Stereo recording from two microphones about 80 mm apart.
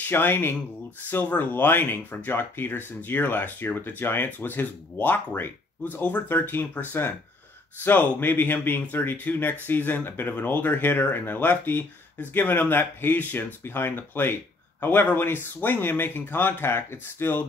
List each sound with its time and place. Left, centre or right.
0.0 s speech: left